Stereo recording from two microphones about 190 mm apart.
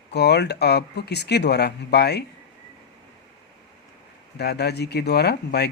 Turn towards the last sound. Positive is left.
turn(degrees=60)  # may be behind; listen again after turning